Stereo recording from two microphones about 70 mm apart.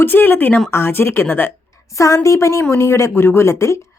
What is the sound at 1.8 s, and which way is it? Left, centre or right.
Speech, left.